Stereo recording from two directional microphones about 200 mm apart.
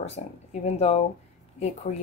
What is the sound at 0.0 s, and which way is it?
Speech, 35° left (ahead or behind).